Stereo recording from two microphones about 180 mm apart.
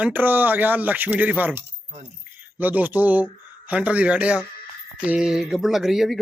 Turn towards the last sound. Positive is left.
turn(degrees=0)  # may be behind; listen again after turning